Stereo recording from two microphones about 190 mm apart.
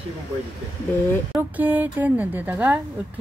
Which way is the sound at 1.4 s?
10° right (ahead or behind).